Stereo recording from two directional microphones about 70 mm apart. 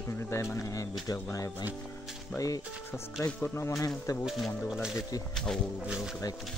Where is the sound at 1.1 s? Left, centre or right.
Left.